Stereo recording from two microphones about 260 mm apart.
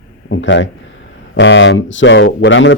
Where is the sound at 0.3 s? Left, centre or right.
Left.